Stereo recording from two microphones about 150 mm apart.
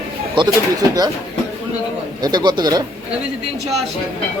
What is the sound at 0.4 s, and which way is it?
Speech, 30° right (ahead or behind).